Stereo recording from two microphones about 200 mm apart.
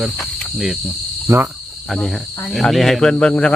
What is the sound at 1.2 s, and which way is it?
Speech, 10° right (ahead or behind).